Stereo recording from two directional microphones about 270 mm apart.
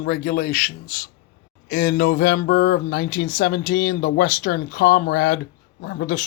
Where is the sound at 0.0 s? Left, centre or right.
Left.